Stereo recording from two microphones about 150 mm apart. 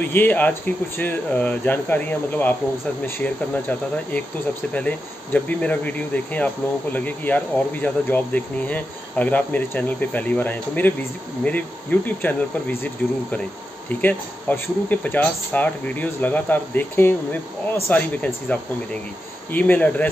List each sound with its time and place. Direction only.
0.0 s speech: 10° left (ahead or behind)
4.7 s speech: 10° left (ahead or behind)